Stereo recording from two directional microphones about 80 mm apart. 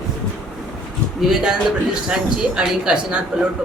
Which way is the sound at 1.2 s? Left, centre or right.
Centre.